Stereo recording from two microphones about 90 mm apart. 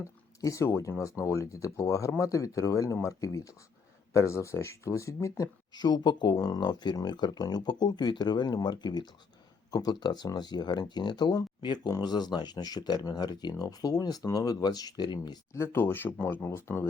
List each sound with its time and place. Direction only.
0.4 s speech: 35° left (ahead or behind)
5.7 s speech: 50° left (ahead or behind)
15.5 s speech: 30° left (ahead or behind)